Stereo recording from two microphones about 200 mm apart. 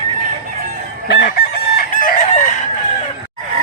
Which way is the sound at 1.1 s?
50° left (ahead or behind).